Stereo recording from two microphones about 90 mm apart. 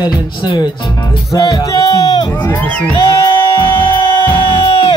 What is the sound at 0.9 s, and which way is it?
Music, 40° left (ahead or behind).